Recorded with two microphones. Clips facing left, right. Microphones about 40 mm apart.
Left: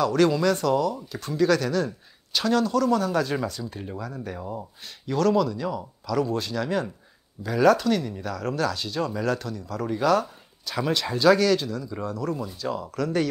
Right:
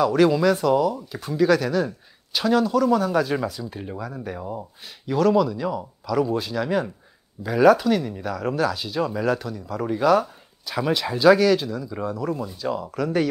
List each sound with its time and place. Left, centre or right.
0.0 s speech: centre